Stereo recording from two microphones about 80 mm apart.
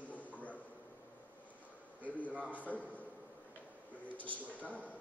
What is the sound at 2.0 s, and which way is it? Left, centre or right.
Speech, centre.